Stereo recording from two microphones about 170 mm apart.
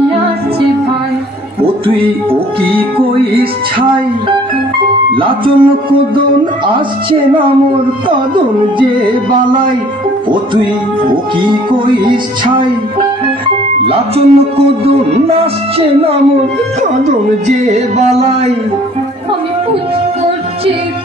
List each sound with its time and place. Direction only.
1.6 s music: 30° right (ahead or behind)
2.7 s a man's voice: 35° right (ahead or behind)
5.1 s music: 30° right (ahead or behind)
13.8 s a man's voice: 35° right (ahead or behind)
16.8 s speech: 45° right (ahead or behind)